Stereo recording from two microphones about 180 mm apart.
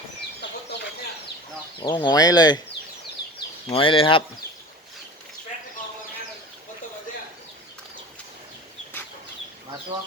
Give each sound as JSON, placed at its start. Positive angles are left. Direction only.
{"t": 0.4, "sound": "chicken", "side_deg": 75}
{"t": 1.8, "sound": "speech", "side_deg": 25}
{"t": 3.7, "sound": "speech", "side_deg": 30}